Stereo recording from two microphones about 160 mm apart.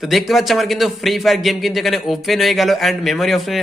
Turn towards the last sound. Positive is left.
turn(degrees=0)  # may be behind; listen again after turning